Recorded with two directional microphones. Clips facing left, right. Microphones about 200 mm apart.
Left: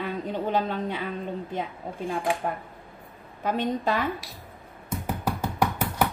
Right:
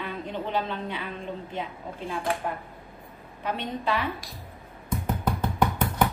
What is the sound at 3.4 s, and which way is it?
Speech, 45° left (ahead or behind).